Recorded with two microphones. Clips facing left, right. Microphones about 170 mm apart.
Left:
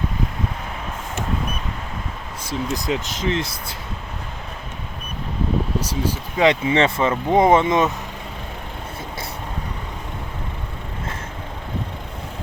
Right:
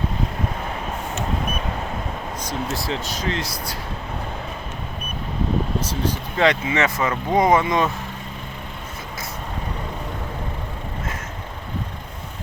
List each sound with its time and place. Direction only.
2.7 s speech: 20° left (ahead or behind)
5.8 s speech: 10° left (ahead or behind)
6.4 s speech: 25° left (ahead or behind)